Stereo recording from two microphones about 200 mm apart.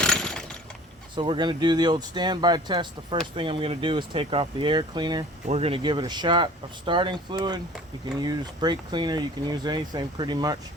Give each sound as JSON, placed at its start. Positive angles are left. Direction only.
{"t": 0.0, "sound": "mechanisms", "side_deg": 5}
{"t": 1.1, "sound": "speech", "side_deg": -25}